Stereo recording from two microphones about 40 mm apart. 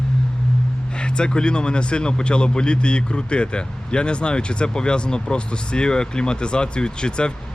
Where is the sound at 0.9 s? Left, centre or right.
Left.